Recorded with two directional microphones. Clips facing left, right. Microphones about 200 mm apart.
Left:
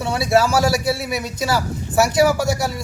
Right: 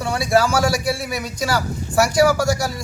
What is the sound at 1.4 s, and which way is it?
Speech, 25° left (ahead or behind).